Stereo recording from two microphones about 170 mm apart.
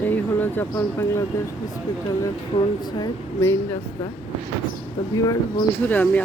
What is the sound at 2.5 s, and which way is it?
Speech, 40° left (ahead or behind).